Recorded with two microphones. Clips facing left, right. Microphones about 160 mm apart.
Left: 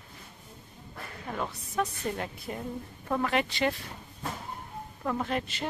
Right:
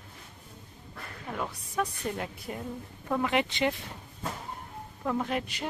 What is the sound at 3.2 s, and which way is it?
Speech, 20° right (ahead or behind).